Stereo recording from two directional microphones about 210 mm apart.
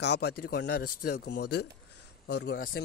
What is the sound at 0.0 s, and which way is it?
Speech, 55° left (ahead or behind).